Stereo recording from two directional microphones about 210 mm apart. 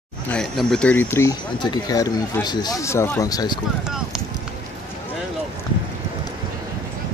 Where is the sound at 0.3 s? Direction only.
Centre (ahead or behind); by 3.5 s 15° left (ahead or behind).